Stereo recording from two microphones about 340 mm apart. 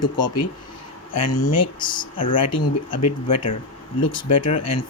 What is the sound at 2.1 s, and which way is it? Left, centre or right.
Speech, centre.